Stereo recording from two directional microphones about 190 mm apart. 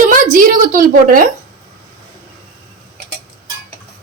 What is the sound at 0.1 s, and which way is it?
A woman's voice, 45° right (ahead or behind).